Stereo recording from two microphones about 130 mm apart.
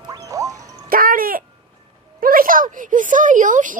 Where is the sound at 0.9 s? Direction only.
90° right.